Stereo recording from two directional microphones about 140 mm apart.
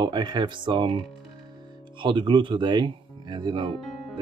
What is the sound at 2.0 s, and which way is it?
Speech, 35° right (ahead or behind).